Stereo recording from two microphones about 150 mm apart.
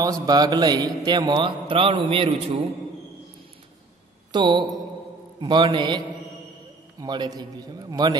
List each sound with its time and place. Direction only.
0.0 s a man's voice: 25° right (ahead or behind)
4.3 s mantra: 30° right (ahead or behind)
5.4 s a man's voice: 30° right (ahead or behind)